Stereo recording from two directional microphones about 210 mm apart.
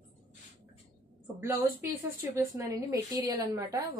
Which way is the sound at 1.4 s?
15° right (ahead or behind).